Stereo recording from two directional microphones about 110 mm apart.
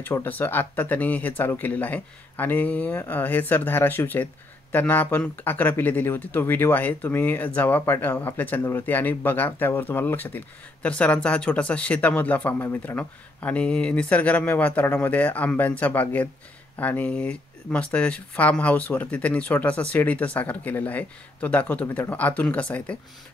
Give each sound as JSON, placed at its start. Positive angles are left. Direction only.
{"t": 0.0, "sound": "speech", "side_deg": 15}